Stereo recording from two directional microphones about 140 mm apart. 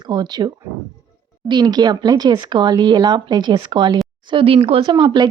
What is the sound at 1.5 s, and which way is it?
Speech, 30° right (ahead or behind).